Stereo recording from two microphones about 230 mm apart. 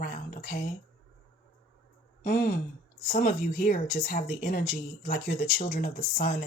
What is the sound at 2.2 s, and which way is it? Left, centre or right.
Speech, left.